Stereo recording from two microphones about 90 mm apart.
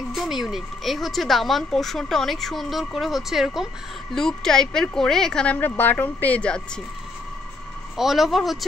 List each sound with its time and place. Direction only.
0.1 s speech: 5° right (ahead or behind)
5.6 s a woman's voice: 20° left (ahead or behind)
8.0 s speech: centre (ahead or behind)